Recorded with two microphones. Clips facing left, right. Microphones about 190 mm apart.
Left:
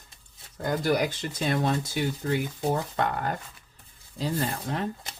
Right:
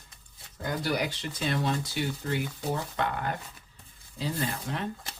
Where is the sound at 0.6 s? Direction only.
50° left (ahead or behind).